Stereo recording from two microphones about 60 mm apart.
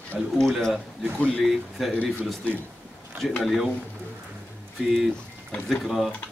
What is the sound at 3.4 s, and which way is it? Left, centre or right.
Speech, centre.